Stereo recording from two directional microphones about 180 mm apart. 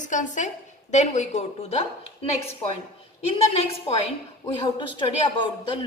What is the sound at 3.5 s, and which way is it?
A woman's voice, 35° left (ahead or behind).